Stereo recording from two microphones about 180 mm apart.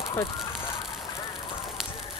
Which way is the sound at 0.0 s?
20° left (ahead or behind).